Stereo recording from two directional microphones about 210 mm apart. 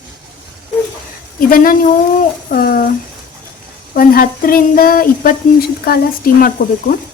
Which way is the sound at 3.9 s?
45° left (ahead or behind).